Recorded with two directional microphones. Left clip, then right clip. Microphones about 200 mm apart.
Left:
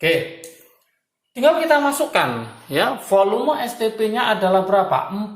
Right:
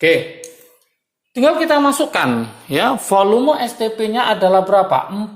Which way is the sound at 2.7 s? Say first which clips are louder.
Right 3 dB; 35° right (ahead or behind).